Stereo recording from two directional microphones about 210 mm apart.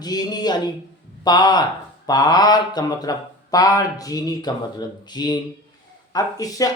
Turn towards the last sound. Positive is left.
turn(degrees=15)  # may be behind; listen again after turning